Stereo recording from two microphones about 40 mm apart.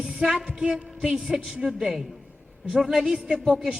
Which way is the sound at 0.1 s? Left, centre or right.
Centre.